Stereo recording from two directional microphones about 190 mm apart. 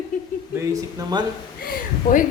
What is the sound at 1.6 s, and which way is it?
Speech, 45° left (ahead or behind).